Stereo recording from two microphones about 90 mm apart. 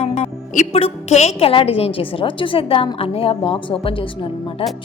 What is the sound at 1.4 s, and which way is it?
A woman's voice, 90° left.